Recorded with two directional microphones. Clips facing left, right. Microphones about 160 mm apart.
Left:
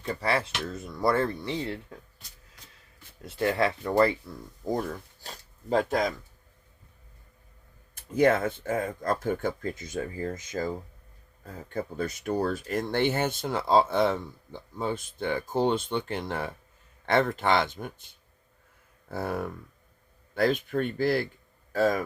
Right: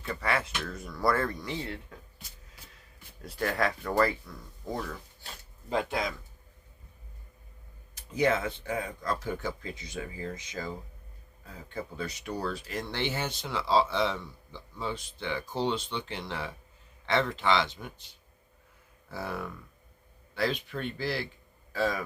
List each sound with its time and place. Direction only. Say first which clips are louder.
0.0 s speech: left 3 dB; 35° left (ahead or behind)
3.2 s speech: left 4 dB; 25° left (ahead or behind)
4.7 s speech: left 6 dB; 40° left (ahead or behind)
7.9 s speech: left 5 dB; 50° left (ahead or behind)